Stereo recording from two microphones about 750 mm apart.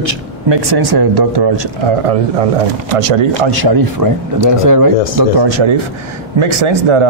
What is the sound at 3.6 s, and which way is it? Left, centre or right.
A man's voice, right.